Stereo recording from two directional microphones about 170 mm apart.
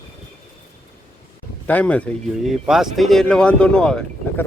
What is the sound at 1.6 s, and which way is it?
Speech, 10° left (ahead or behind).